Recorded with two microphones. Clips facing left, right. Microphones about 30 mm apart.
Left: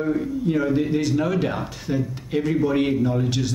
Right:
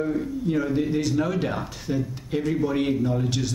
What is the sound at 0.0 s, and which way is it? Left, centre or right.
Speech, centre.